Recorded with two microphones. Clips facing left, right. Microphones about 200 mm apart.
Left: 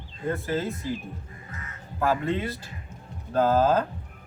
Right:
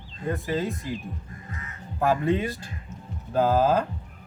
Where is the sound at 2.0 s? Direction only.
15° right (ahead or behind).